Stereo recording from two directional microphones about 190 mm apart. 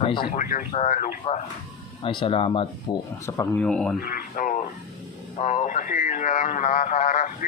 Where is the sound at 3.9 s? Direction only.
50° left (ahead or behind).